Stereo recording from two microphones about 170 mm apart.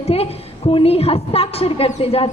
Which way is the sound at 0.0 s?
35° left (ahead or behind).